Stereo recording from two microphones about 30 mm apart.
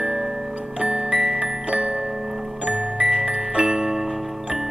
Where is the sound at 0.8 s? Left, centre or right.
Right.